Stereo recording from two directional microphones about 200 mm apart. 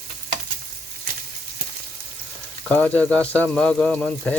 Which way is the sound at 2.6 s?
5° left (ahead or behind).